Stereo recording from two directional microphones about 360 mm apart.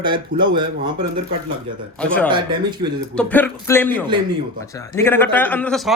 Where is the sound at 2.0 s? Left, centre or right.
Centre.